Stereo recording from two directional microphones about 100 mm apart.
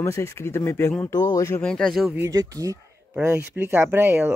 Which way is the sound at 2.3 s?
35° right (ahead or behind).